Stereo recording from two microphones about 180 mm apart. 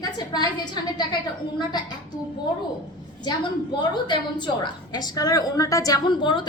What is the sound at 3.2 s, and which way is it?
A woman's voice, 25° left (ahead or behind).